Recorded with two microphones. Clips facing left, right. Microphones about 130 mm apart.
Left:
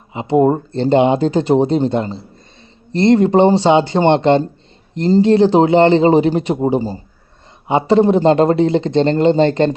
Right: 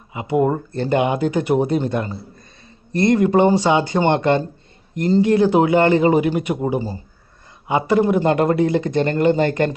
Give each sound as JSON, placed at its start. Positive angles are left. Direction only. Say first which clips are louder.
{"t": 0.1, "sound": "speech", "louder": "left 5 dB", "side_deg": 25}